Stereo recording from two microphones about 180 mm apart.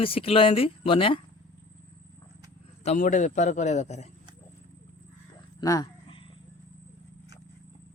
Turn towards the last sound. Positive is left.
turn(degrees=30)  # may be behind; listen again after turning